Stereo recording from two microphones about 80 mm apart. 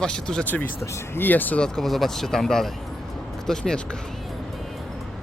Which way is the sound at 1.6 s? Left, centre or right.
Centre.